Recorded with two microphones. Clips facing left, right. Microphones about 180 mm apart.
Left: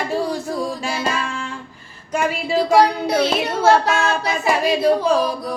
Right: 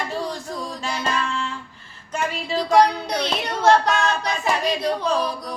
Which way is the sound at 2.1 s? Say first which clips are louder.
Left 5 dB; 10° left (ahead or behind).